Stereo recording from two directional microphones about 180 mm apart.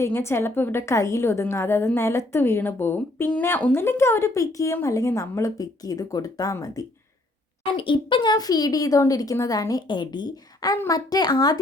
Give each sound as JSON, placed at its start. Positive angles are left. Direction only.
{"t": 0.0, "sound": "a woman's voice", "side_deg": 15}